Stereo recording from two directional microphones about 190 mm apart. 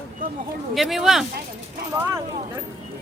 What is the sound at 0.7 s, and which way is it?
Speech, centre (ahead or behind).